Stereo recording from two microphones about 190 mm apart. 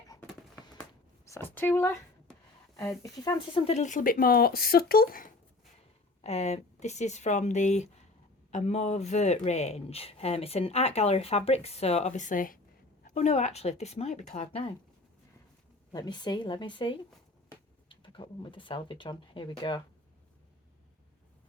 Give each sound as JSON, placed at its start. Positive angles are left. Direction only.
{"t": 1.3, "sound": "speech", "side_deg": 10}
{"t": 3.7, "sound": "speech", "side_deg": 40}
{"t": 6.2, "sound": "speech", "side_deg": 35}
{"t": 15.9, "sound": "speech", "side_deg": 20}